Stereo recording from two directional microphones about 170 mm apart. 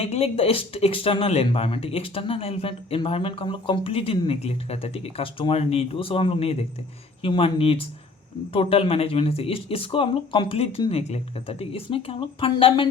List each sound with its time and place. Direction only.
0.0 s speech: 35° left (ahead or behind)